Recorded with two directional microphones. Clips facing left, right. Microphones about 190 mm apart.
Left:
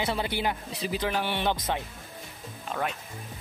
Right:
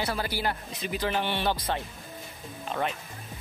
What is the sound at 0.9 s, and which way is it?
Speech, 10° left (ahead or behind).